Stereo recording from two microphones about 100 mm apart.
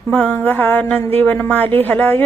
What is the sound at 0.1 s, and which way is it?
A woman's voice, 15° left (ahead or behind).